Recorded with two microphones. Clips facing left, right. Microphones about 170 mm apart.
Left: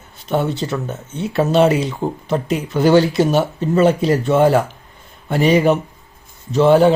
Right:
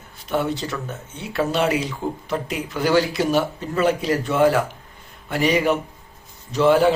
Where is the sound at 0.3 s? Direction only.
25° left (ahead or behind).